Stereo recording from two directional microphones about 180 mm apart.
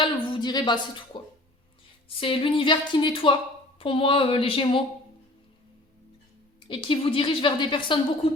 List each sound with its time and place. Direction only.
0.0 s a sound: 25° left (ahead or behind)
2.0 s a woman's voice: 30° left (ahead or behind)
6.7 s a woman's voice: 30° left (ahead or behind)